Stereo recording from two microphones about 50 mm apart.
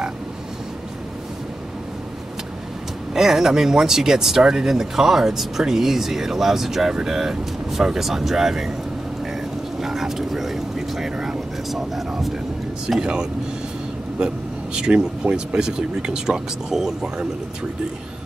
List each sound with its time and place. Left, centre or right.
3.1 s speech: centre
9.8 s speech: centre
13.0 s speech: centre